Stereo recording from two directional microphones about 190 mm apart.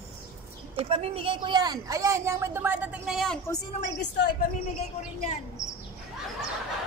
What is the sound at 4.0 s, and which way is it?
Speech, 60° left (ahead or behind).